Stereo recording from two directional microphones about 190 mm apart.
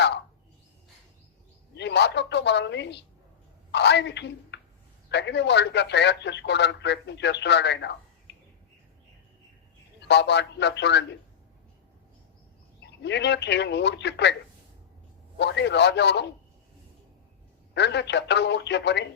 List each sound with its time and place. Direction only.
1.7 s a woman's voice: 65° left (ahead or behind)
10.0 s speech: 65° left (ahead or behind)
13.0 s speech: 65° left (ahead or behind)
15.4 s speech: 65° left (ahead or behind)
17.7 s speech: 65° left (ahead or behind)